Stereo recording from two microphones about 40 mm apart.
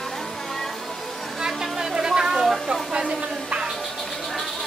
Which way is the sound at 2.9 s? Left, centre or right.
Right.